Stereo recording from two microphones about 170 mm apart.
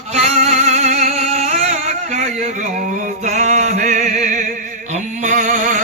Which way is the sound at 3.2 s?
45° right (ahead or behind).